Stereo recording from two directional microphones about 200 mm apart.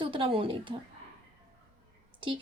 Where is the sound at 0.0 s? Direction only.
25° right (ahead or behind).